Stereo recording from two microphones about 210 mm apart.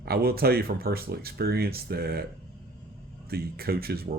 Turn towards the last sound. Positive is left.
turn(degrees=-45)  # may be behind; listen again after turning